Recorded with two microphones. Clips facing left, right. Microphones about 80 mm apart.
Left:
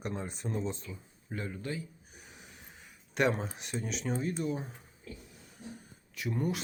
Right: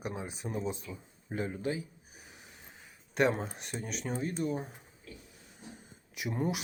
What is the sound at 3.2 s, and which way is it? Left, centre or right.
Speech, centre.